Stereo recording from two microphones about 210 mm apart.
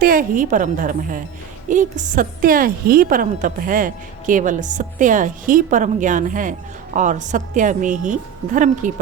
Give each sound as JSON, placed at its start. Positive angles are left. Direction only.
{"t": 0.0, "sound": "a woman's voice", "side_deg": -40}